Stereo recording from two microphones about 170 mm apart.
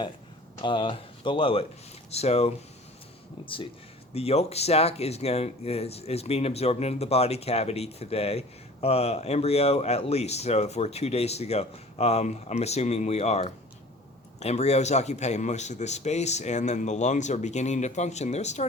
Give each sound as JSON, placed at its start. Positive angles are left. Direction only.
{"t": 0.6, "sound": "speech", "side_deg": 30}